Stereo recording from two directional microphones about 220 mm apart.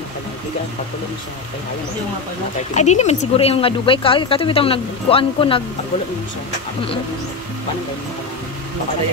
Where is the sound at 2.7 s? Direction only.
30° left (ahead or behind).